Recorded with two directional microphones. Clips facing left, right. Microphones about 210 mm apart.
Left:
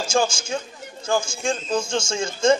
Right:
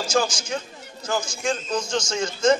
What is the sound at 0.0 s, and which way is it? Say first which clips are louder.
Speech: left 1 dB; 25° left (ahead or behind).